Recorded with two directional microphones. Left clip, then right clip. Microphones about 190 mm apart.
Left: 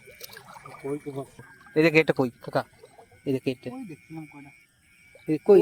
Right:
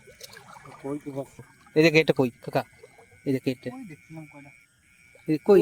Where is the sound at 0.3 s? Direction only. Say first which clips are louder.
Left 2 dB; 40° left (ahead or behind).